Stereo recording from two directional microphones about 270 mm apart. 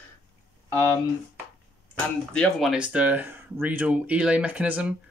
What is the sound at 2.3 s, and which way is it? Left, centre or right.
Speech, centre.